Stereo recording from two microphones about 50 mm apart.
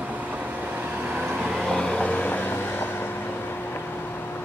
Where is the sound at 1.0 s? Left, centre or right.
Right.